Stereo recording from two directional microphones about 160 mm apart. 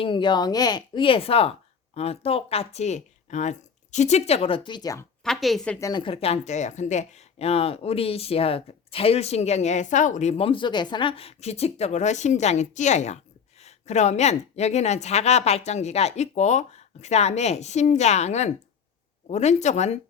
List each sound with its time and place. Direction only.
0.0 s speech: 30° left (ahead or behind)
5.2 s a woman's voice: centre (ahead or behind)
5.8 s a woman's voice: 30° left (ahead or behind); by 20.0 s 45° left (ahead or behind)